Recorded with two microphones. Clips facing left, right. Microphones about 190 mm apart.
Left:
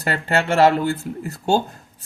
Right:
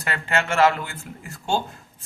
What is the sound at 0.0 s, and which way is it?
Speech, 35° left (ahead or behind).